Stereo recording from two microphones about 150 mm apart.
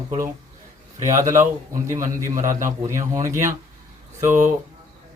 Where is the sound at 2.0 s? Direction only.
60° right (ahead or behind).